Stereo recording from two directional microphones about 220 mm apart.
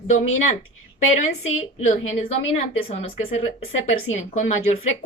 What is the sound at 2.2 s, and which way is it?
Speech, 25° left (ahead or behind).